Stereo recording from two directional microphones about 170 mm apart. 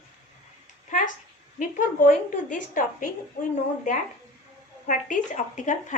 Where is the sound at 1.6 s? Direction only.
45° left (ahead or behind).